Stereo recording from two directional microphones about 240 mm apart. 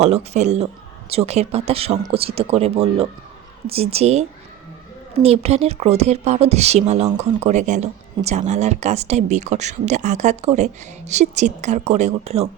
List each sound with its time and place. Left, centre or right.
0.0 s speech: right